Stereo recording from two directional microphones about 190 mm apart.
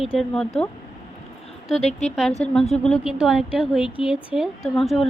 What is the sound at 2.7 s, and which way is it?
A woman's voice, 5° left (ahead or behind).